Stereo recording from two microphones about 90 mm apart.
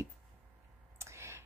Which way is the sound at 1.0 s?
30° right (ahead or behind).